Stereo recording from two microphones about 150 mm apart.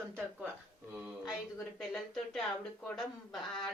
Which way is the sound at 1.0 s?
Centre (ahead or behind).